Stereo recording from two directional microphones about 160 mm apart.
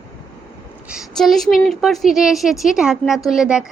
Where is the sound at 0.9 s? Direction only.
Centre (ahead or behind).